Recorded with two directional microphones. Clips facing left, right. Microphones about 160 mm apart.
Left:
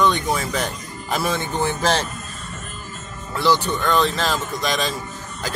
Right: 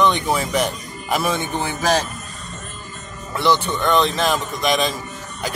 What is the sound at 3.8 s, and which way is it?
Speech, 20° right (ahead or behind).